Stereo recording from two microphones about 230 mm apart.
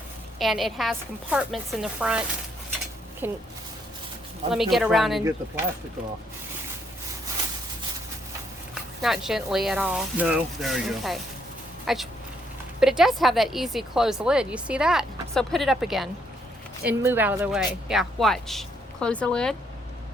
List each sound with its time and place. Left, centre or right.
0.3 s a woman's voice: centre
3.2 s speech: centre
4.5 s a woman's voice: centre
9.0 s a woman's voice: centre